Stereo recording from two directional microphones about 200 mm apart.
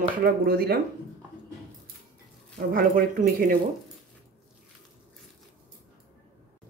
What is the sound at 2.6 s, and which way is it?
Speech, 45° right (ahead or behind).